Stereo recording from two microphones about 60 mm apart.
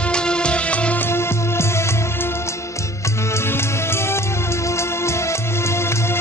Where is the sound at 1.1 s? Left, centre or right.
Left.